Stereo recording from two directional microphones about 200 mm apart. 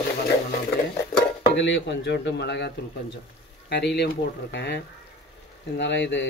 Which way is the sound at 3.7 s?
55° left (ahead or behind).